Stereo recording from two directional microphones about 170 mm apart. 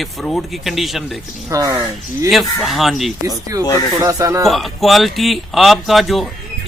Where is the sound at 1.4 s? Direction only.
20° right (ahead or behind).